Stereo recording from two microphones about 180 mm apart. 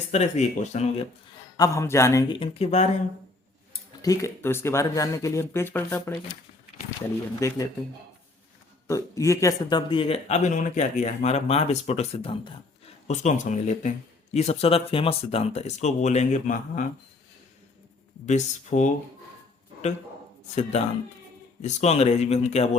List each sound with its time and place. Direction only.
0.1 s speech: 40° left (ahead or behind)
1.5 s speech: 20° left (ahead or behind)
2.3 s speech: 30° left (ahead or behind)
4.0 s speech: 20° left (ahead or behind)
7.3 s speech: 20° left (ahead or behind)
8.9 s speech: 20° left (ahead or behind); by 16.8 s 45° left (ahead or behind)
18.3 s speech: 40° left (ahead or behind)
21.6 s speech: 35° left (ahead or behind)